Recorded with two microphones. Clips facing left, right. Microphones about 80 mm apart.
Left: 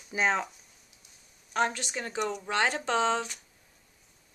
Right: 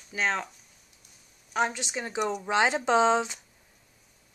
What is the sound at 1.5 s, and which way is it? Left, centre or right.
Speech, centre.